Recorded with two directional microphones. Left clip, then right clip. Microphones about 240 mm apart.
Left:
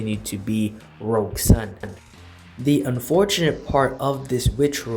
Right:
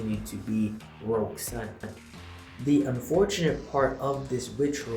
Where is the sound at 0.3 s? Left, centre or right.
Left.